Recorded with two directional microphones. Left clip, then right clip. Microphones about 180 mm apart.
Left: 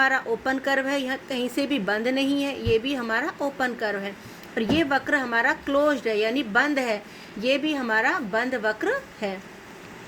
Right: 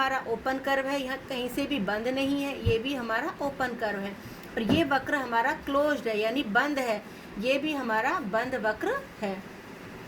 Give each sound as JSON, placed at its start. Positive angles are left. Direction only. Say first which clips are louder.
{"t": 0.0, "sound": "a woman's voice", "louder": "left 6 dB", "side_deg": 45}